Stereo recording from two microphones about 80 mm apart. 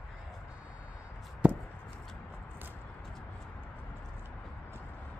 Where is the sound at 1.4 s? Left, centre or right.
Centre.